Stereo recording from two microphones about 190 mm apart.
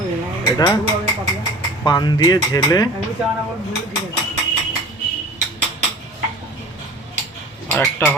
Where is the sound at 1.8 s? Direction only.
20° left (ahead or behind).